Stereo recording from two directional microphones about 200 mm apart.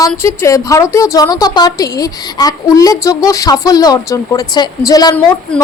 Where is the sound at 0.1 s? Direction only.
15° left (ahead or behind).